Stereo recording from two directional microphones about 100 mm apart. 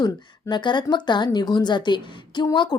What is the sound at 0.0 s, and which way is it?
Speech, 45° left (ahead or behind).